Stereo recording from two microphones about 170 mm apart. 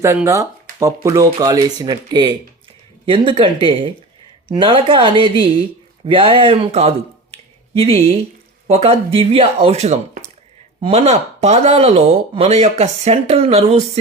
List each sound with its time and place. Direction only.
0.0 s speech: 15° right (ahead or behind); by 14.0 s 40° right (ahead or behind)